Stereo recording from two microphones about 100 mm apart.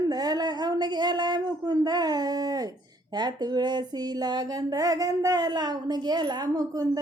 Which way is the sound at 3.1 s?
45° right (ahead or behind).